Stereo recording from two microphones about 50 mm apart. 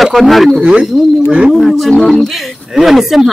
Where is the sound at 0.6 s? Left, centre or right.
Centre.